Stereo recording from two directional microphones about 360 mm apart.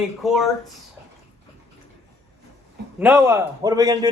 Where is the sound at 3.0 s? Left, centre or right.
Centre.